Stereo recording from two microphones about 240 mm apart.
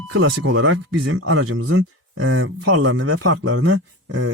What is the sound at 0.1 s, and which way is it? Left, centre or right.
A man's voice, right.